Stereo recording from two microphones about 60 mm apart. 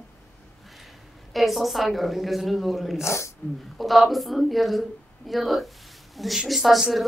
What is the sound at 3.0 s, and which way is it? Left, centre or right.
Speech, left.